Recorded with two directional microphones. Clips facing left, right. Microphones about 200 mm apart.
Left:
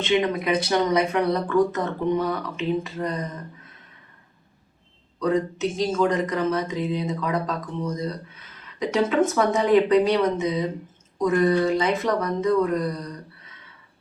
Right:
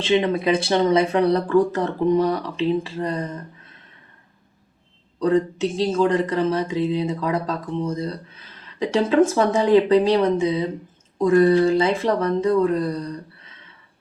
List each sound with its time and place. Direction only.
0.0 s speech: 30° right (ahead or behind)
5.2 s speech: 30° right (ahead or behind)